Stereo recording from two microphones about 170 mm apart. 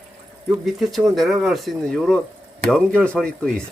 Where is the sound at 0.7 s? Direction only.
Centre (ahead or behind).